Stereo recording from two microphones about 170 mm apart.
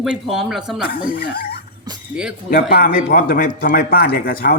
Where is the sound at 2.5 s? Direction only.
60° left (ahead or behind).